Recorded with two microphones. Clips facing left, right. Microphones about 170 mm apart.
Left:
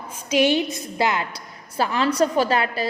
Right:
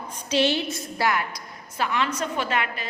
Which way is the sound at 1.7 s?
35° left (ahead or behind).